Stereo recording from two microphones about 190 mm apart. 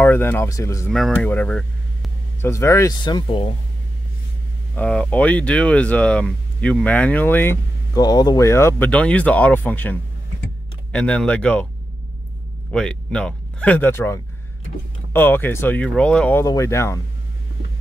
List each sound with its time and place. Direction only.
0.0 s speech: 10° left (ahead or behind)
0.9 s speech: 5° left (ahead or behind); by 3.5 s 25° left (ahead or behind)
4.7 s speech: 5° left (ahead or behind)
12.7 s speech: 5° left (ahead or behind)